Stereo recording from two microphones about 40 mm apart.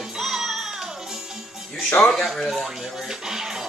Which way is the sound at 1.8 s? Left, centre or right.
Left.